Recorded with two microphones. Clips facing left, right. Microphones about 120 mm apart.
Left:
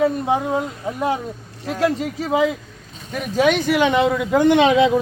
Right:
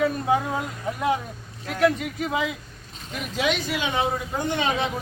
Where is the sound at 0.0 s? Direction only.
25° left (ahead or behind).